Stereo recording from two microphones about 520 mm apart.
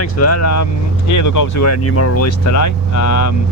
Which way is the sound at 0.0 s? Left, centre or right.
Left.